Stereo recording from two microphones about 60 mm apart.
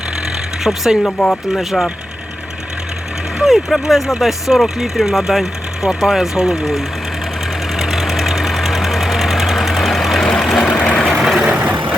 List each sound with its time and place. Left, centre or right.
0.6 s speech: centre
1.0 s speech: centre
3.4 s speech: centre
7.7 s engine knocking: centre
10.4 s vehicle: centre
11.6 s vehicle: right